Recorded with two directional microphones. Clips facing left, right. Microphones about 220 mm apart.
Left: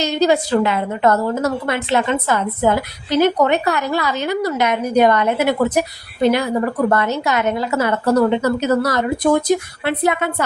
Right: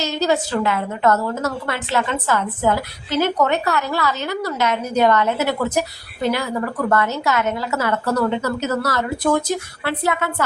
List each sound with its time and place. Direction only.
0.0 s a woman's voice: 15° left (ahead or behind)